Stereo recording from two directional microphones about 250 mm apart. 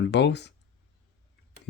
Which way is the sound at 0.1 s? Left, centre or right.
Left.